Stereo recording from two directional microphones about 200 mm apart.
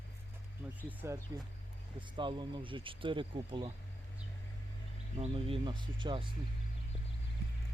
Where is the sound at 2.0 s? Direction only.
25° right (ahead or behind).